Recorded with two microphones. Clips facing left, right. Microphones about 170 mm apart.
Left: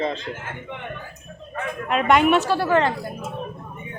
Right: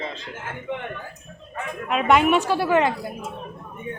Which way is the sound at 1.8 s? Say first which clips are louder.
Left 1 dB; centre (ahead or behind).